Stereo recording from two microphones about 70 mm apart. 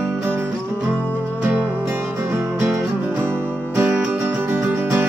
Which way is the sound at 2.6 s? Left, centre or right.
Right.